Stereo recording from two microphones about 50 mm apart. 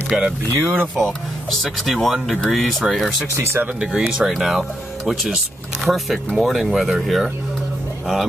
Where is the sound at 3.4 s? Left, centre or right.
Right.